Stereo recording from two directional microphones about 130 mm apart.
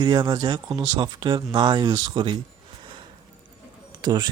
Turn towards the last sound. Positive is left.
turn(degrees=-35)  # may be behind; listen again after turning